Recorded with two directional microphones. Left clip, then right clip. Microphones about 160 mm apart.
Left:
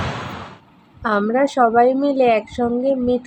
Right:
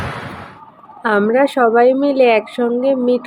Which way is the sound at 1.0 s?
15° right (ahead or behind).